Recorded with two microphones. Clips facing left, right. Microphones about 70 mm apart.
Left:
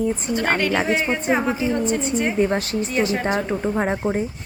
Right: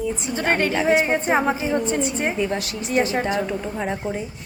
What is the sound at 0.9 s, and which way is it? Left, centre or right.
A woman's voice, right.